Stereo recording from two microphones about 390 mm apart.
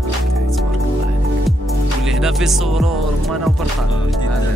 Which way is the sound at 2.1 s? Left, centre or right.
Centre.